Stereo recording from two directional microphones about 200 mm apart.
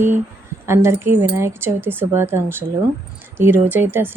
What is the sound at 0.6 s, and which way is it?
Speech, 15° right (ahead or behind).